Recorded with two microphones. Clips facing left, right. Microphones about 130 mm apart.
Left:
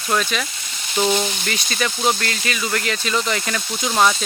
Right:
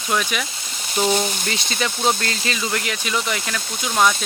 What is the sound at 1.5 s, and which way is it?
Speech, 20° right (ahead or behind).